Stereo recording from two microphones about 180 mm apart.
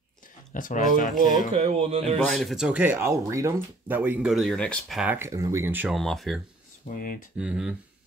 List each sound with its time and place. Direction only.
0.6 s speech: 50° left (ahead or behind)
1.5 s speech: 35° right (ahead or behind)
2.1 s speech: centre (ahead or behind)
5.9 s speech: centre (ahead or behind)
6.9 s speech: 55° left (ahead or behind)
7.3 s speech: 5° right (ahead or behind)